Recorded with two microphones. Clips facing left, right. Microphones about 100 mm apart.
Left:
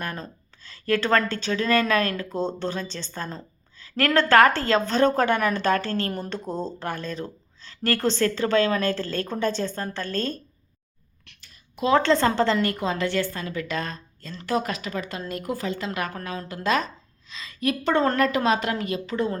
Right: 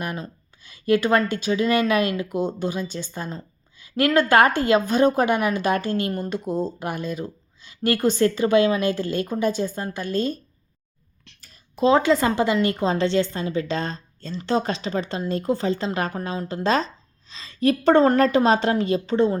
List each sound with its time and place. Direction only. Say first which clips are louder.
0.0 s speech: right 3 dB; 15° right (ahead or behind)
11.3 s a sound: right 1 dB; 35° right (ahead or behind)
12.0 s speech: right 1 dB; 10° right (ahead or behind)
12.6 s a woman's voice: right 4 dB; 30° right (ahead or behind)